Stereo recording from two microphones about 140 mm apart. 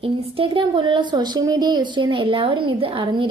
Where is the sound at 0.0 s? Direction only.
40° right (ahead or behind).